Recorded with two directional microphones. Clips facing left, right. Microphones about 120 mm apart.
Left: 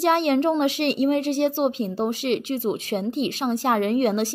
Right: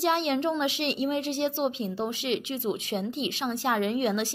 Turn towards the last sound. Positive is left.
turn(degrees=45)  # may be behind; listen again after turning